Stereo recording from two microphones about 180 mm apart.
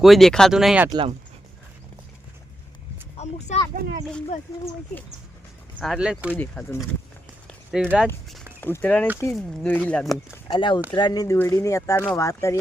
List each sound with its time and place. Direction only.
0.0 s speech: centre (ahead or behind)
0.9 s speech: 25° right (ahead or behind)
3.2 s speech: 35° left (ahead or behind)
5.8 s speech: centre (ahead or behind)
6.3 s speech: 10° left (ahead or behind)
7.4 s a sound: 5° left (ahead or behind)
8.6 s speech: 10° left (ahead or behind)
10.5 s speech: 25° left (ahead or behind)